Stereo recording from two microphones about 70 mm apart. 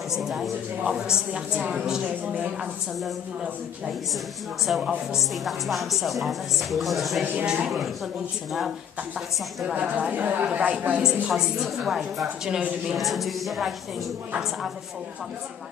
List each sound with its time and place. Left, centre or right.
0.1 s a woman's voice: centre
4.6 s a woman's voice: centre
9.8 s a woman's voice: right
11.2 s a woman's voice: centre
12.9 s speech: centre